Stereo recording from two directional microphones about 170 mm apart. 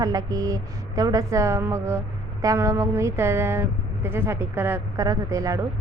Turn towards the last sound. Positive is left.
turn(degrees=-20)  # may be behind; listen again after turning